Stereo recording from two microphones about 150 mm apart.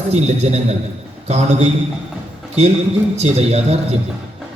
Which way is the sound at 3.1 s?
45° right (ahead or behind).